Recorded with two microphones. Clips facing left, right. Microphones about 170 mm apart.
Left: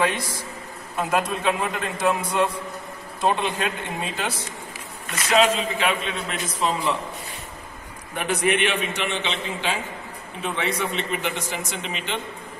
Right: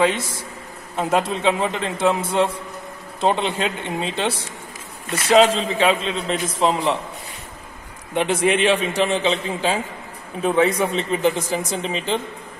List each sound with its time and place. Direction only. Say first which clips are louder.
0.0 s a man's voice: right 4 dB; 25° right (ahead or behind)
8.2 s a man's voice: right 4 dB; 25° right (ahead or behind)